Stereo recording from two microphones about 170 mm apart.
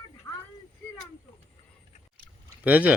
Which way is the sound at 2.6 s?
10° right (ahead or behind).